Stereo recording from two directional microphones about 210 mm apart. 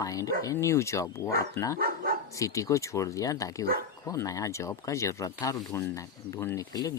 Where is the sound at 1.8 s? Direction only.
45° right (ahead or behind).